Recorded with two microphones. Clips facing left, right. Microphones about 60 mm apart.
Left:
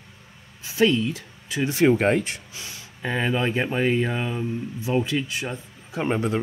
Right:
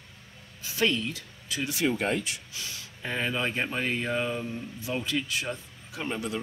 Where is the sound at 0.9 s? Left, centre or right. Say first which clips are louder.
Left 7 dB; left.